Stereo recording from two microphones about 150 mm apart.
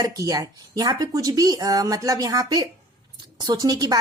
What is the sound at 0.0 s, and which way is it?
A woman's voice, 25° right (ahead or behind).